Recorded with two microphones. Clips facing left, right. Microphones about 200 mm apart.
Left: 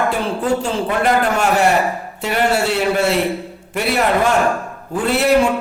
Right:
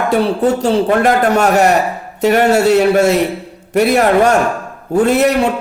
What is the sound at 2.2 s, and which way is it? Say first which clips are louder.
A man's voice: right 7 dB; 40° right (ahead or behind).